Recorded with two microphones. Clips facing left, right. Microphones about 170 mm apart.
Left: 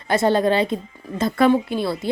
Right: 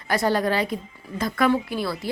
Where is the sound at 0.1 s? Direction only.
25° left (ahead or behind).